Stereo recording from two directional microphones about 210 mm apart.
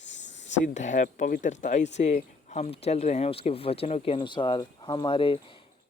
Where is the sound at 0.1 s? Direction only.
60° left (ahead or behind).